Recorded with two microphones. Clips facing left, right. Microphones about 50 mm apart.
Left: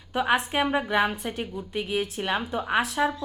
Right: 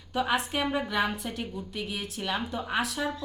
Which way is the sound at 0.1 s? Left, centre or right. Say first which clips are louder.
Left 4 dB; left.